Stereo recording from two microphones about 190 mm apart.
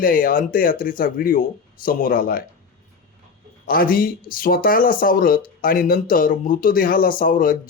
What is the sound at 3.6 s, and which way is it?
Speech, 50° left (ahead or behind).